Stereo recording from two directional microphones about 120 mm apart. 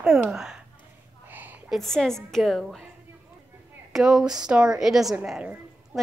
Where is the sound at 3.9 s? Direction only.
5° right (ahead or behind).